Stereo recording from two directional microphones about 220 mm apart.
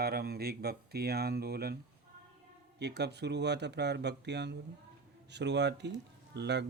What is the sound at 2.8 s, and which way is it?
Speech, 50° right (ahead or behind).